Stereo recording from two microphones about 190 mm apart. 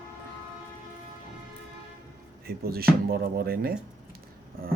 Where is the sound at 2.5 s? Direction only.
55° right (ahead or behind).